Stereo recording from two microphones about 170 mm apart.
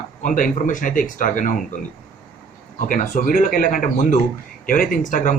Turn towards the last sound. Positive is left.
turn(degrees=50)  # may be behind; listen again after turning